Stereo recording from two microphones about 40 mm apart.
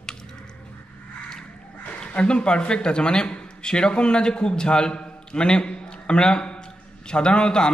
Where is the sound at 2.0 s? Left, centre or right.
Left.